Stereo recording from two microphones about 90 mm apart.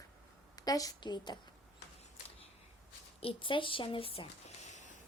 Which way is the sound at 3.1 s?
80° left.